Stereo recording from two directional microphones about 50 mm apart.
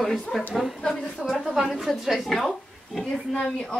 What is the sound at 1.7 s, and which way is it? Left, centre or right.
A woman's voice, centre.